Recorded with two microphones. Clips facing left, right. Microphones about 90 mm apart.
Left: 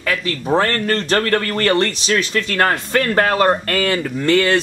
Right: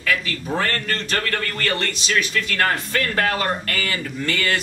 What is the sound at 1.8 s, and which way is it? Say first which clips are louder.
Speech: left 5 dB; 30° left (ahead or behind).